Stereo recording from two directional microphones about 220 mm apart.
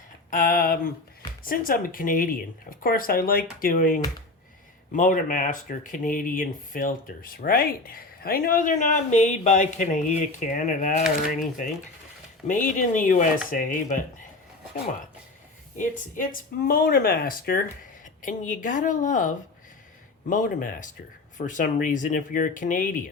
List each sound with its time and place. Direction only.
0.3 s a sound: 40° left (ahead or behind)
1.5 s speech: 40° left (ahead or behind)
12.5 s speech: 35° left (ahead or behind)
15.8 s speech: 35° left (ahead or behind)